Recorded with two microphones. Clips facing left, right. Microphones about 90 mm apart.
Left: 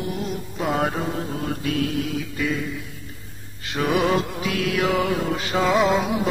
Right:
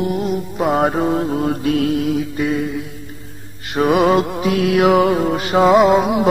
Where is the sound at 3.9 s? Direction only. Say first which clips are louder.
Right 6 dB; 55° right (ahead or behind); by 5.4 s 35° right (ahead or behind).